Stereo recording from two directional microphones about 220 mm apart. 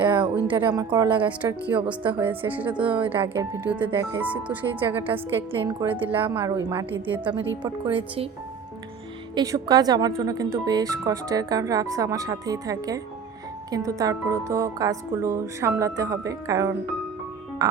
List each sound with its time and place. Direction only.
0.0 s a sound: 20° right (ahead or behind)
0.5 s speech: 20° right (ahead or behind)
1.2 s speech: 5° right (ahead or behind)
2.0 s speech: 20° right (ahead or behind)
2.3 s speech: 10° right (ahead or behind)
5.9 s speech: 10° right (ahead or behind)
7.6 s speech: 25° right (ahead or behind)
9.3 s speech: 15° right (ahead or behind)